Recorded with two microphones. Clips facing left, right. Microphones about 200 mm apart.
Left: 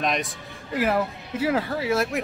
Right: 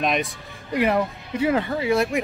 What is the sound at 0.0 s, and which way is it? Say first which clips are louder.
Speech: right 3 dB; centre (ahead or behind).